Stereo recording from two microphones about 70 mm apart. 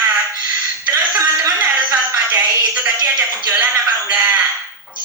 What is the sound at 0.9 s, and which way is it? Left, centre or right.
Music, right.